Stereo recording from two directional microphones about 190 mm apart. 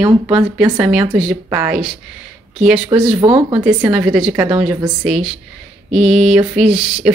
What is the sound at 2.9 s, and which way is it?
Speech, 25° right (ahead or behind).